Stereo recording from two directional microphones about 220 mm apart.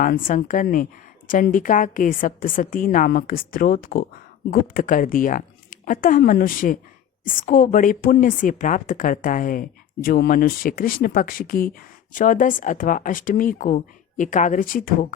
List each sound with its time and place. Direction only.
0.0 s speech: 35° left (ahead or behind)